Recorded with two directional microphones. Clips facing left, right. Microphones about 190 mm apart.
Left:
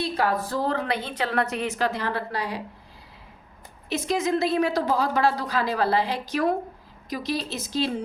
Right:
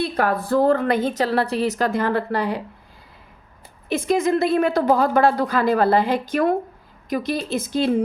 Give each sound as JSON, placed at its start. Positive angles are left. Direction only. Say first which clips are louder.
{"t": 0.0, "sound": "a woman's voice", "louder": "right 3 dB", "side_deg": -55}
{"t": 3.8, "sound": "a woman's voice", "louder": "right 5 dB", "side_deg": -55}